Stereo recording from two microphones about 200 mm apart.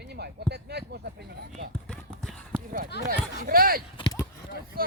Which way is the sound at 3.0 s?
45° right (ahead or behind).